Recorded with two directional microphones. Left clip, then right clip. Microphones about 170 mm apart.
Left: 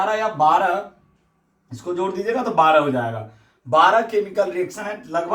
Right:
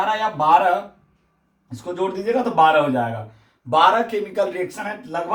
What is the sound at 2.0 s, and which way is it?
Speech, 20° right (ahead or behind).